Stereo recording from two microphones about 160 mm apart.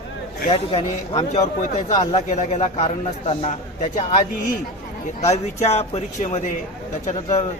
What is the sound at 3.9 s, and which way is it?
Speech, 60° left (ahead or behind).